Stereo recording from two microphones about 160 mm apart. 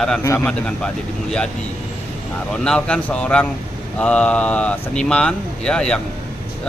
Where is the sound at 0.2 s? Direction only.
20° left (ahead or behind).